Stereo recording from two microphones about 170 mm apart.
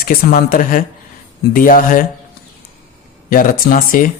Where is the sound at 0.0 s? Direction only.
55° left (ahead or behind).